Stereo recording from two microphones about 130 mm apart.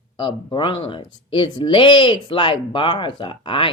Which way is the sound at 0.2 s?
40° left (ahead or behind).